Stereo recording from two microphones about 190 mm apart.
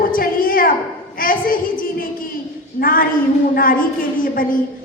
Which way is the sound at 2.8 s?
45° left (ahead or behind).